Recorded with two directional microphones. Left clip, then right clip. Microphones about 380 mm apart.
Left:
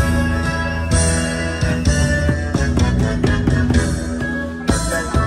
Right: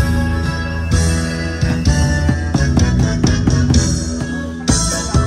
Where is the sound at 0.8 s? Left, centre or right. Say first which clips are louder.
Left 1 dB; centre.